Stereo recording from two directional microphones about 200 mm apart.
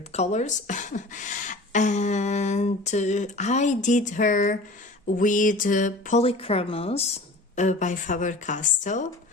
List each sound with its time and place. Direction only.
0.1 s speech: 35° left (ahead or behind)